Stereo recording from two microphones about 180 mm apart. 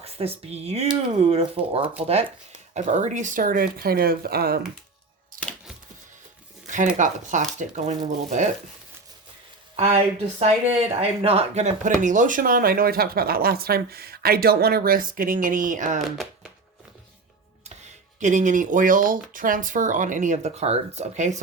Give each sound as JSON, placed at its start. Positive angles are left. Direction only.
{"t": 0.0, "sound": "speech", "side_deg": -35}
{"t": 6.9, "sound": "speech", "side_deg": -45}
{"t": 9.7, "sound": "speech", "side_deg": -35}
{"t": 17.7, "sound": "speech", "side_deg": -40}